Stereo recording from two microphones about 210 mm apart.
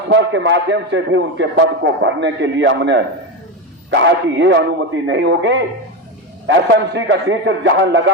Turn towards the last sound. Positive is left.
turn(degrees=-60)  # may be behind; listen again after turning